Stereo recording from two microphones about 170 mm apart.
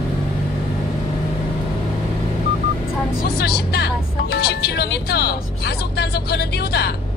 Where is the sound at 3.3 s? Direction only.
70° left (ahead or behind).